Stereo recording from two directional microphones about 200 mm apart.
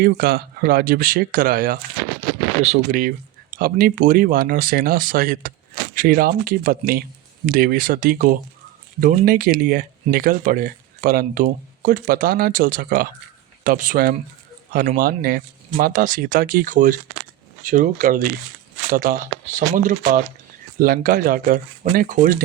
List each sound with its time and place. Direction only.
0.0 s speech: 50° right (ahead or behind)